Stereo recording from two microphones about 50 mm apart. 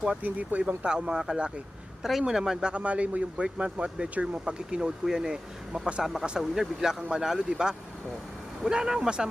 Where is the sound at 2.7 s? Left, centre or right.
Right.